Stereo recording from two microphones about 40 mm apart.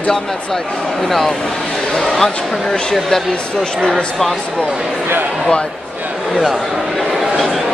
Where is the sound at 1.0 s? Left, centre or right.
Centre.